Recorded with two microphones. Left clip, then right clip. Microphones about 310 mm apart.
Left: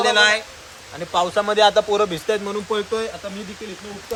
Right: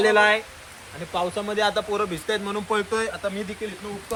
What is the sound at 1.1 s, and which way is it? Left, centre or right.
Speech, left.